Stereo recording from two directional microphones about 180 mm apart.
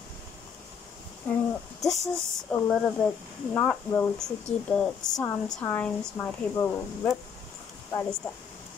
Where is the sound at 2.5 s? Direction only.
5° left (ahead or behind).